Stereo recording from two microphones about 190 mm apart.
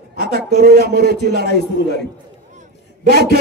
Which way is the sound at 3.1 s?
55° right (ahead or behind).